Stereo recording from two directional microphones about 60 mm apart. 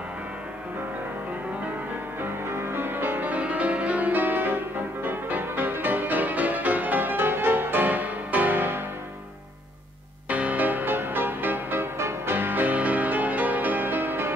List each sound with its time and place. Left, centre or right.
2.2 s music: right
10.3 s music: right